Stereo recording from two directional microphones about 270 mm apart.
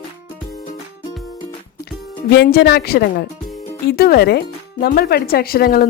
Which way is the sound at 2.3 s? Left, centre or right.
Left.